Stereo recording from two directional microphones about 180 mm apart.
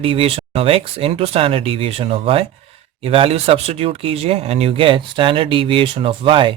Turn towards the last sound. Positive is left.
turn(degrees=-30)  # may be behind; listen again after turning